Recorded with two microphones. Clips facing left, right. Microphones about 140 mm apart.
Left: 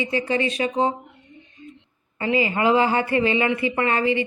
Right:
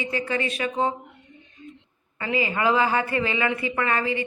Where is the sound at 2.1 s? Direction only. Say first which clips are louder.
Left 4 dB; 25° left (ahead or behind).